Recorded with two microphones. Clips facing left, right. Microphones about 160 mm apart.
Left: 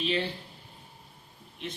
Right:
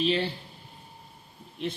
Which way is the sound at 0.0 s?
35° right (ahead or behind).